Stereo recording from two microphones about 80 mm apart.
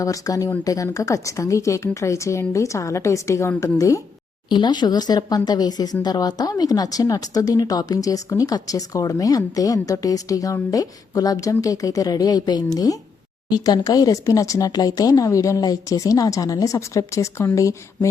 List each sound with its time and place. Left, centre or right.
0.0 s a woman's voice: left
4.4 s speech: left